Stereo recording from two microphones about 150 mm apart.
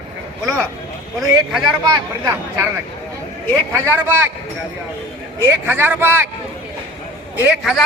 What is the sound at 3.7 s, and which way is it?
Speech, 15° right (ahead or behind).